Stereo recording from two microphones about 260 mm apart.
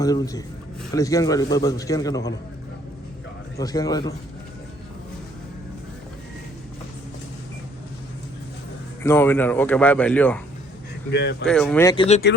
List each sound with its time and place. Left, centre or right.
0.0 s speech: centre
3.6 s speech: centre
9.0 s speech: centre
11.1 s speech: left
11.4 s speech: centre